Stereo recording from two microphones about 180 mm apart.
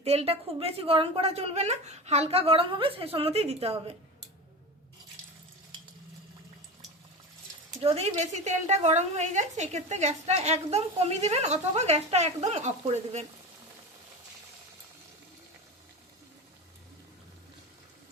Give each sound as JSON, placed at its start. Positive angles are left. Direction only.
{"t": 0.0, "sound": "a woman's voice", "side_deg": -35}
{"t": 7.8, "sound": "a woman's voice", "side_deg": -35}